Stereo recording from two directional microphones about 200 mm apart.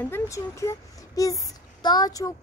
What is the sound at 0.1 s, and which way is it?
Speech, 15° left (ahead or behind).